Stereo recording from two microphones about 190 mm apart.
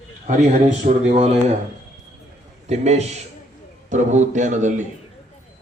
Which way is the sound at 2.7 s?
35° right (ahead or behind).